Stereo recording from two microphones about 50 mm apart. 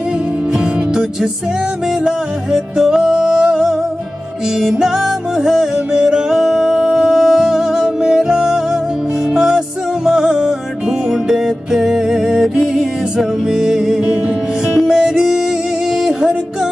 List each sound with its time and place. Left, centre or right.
2.0 s music: centre